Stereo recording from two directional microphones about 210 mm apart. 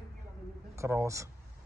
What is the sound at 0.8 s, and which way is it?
Speech, 15° right (ahead or behind).